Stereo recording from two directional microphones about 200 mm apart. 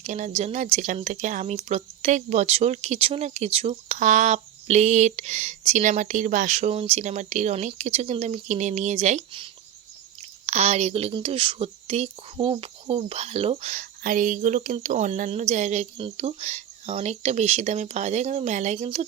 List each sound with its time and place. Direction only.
0.0 s speech: 35° right (ahead or behind)